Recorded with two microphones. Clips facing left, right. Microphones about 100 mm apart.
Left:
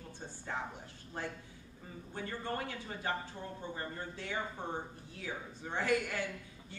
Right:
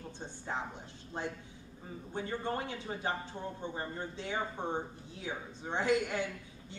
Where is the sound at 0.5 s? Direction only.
20° right (ahead or behind).